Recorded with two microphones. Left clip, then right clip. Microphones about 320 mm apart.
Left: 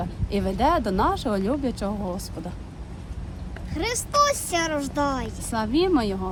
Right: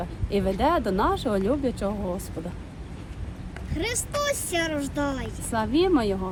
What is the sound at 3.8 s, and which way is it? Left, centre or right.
Speech, centre.